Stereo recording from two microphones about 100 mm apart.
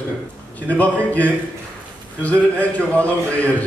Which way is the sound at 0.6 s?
15° left (ahead or behind).